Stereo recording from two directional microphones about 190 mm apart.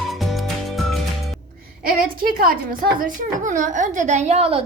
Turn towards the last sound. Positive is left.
turn(degrees=-30)  # may be behind; listen again after turning